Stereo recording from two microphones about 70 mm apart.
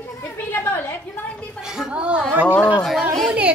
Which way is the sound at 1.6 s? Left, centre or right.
Centre.